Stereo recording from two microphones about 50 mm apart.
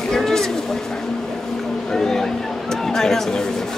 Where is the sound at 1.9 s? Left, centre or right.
Centre.